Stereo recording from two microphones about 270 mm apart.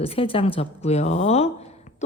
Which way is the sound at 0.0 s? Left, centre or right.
Left.